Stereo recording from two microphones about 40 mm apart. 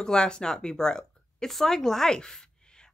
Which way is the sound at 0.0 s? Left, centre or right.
Centre.